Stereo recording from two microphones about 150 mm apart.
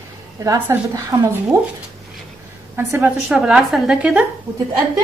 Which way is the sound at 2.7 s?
15° right (ahead or behind).